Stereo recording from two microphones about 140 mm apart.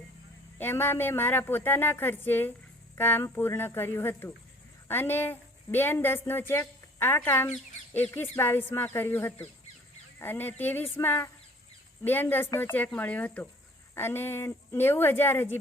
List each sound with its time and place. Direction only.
0.6 s a woman's voice: 15° left (ahead or behind)